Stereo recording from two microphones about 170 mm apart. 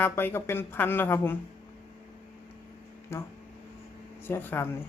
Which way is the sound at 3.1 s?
15° left (ahead or behind).